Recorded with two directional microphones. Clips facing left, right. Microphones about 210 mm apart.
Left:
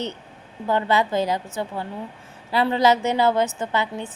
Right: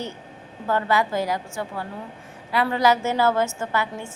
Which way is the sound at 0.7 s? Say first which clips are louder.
Left 1 dB; 20° left (ahead or behind).